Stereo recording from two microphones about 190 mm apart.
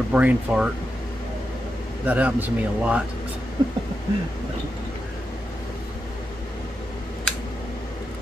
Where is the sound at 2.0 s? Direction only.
10° right (ahead or behind).